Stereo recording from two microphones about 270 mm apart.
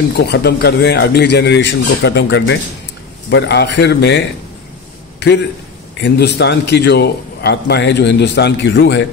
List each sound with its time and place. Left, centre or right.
0.2 s a man's voice: left
5.9 s a man's voice: left